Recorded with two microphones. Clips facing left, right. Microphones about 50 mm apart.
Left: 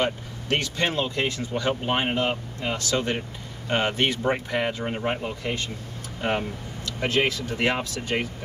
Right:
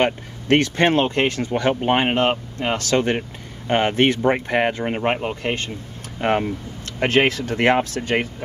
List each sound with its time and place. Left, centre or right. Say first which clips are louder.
0.0 s speech: right 6 dB; right